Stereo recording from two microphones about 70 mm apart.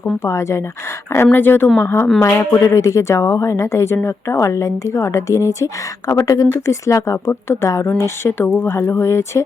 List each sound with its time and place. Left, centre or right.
0.2 s a woman's voice: left
1.1 s a woman's voice: left
6.5 s a woman's voice: left
7.3 s speech: left